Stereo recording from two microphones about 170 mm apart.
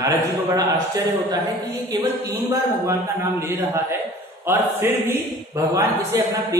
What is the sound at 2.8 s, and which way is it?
A man's voice, 15° right (ahead or behind).